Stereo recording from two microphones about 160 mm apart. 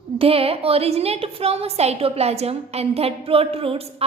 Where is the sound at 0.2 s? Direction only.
35° right (ahead or behind).